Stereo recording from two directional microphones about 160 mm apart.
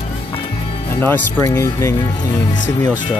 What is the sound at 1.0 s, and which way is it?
Speech, 15° left (ahead or behind).